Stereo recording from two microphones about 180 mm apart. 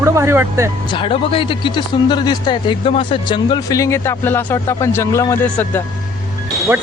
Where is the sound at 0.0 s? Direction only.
15° right (ahead or behind).